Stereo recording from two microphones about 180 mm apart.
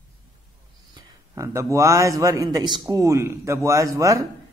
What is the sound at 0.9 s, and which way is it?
A man's voice, 15° right (ahead or behind).